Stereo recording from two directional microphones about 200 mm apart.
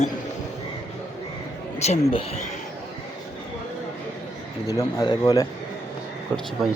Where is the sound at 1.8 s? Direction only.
35° left (ahead or behind).